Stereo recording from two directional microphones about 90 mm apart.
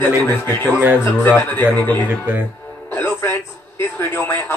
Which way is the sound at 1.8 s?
20° left (ahead or behind).